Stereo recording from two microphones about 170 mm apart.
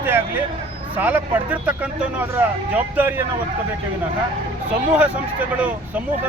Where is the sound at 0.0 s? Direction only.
10° right (ahead or behind).